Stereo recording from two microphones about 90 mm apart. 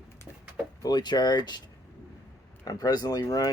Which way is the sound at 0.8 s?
50° left (ahead or behind).